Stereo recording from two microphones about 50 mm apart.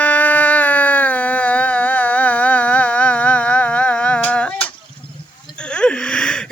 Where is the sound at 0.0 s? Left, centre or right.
Left.